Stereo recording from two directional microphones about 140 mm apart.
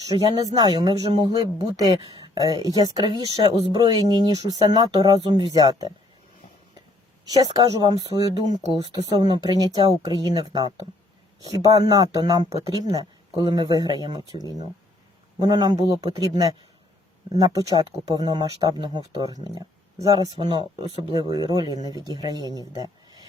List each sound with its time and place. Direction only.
0.2 s speech: 30° right (ahead or behind)
7.3 s speech: 25° right (ahead or behind)
9.9 s speech: 25° left (ahead or behind)
10.2 s speech: 30° right (ahead or behind)
22.4 s speech: 25° left (ahead or behind)
22.8 s a sound: 30° right (ahead or behind)